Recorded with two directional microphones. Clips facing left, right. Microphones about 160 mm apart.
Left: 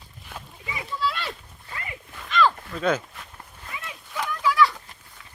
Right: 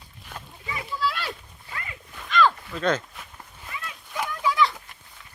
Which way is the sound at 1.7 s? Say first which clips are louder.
Left 1 dB; 25° left (ahead or behind).